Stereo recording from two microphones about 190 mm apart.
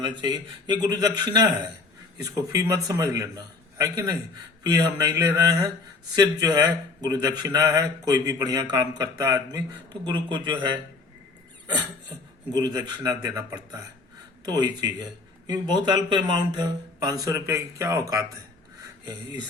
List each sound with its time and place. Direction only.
0.0 s a man's voice: 25° right (ahead or behind)
11.6 s cough: 25° right (ahead or behind)
12.5 s a man's voice: 20° right (ahead or behind)
18.8 s a sound: 20° right (ahead or behind)